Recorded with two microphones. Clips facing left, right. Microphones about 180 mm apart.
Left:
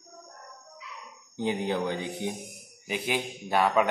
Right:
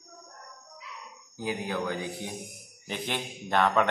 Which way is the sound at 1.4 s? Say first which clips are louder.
Left 4 dB; 25° left (ahead or behind).